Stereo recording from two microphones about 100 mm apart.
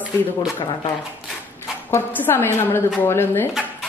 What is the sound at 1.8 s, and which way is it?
Speech, 20° left (ahead or behind).